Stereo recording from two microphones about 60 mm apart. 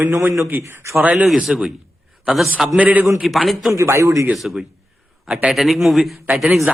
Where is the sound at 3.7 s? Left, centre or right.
Right.